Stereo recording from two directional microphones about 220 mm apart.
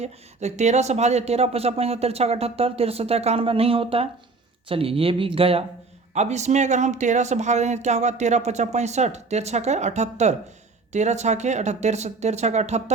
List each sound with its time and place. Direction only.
0.0 s speech: 30° right (ahead or behind)